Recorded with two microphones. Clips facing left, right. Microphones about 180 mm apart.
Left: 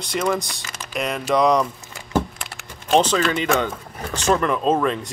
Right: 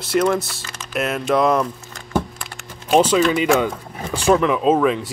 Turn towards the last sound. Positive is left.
turn(degrees=-5)  # may be behind; listen again after turning